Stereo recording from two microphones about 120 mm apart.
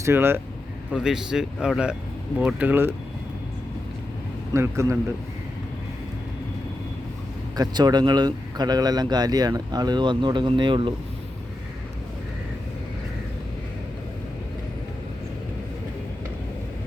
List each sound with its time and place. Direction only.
0.0 s speech: 20° right (ahead or behind)
0.9 s speech: 5° right (ahead or behind)
4.5 s speech: 25° right (ahead or behind)
7.5 s speech: 35° right (ahead or behind)